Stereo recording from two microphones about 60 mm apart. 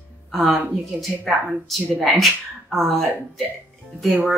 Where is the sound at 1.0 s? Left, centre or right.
Centre.